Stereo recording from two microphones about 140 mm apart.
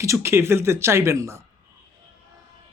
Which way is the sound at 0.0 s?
20° right (ahead or behind).